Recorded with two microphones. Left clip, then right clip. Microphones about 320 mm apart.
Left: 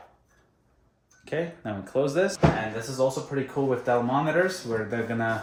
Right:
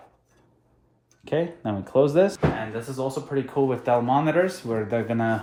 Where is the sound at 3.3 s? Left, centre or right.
Centre.